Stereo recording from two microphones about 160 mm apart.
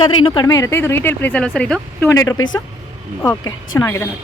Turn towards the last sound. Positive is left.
turn(degrees=15)  # may be behind; listen again after turning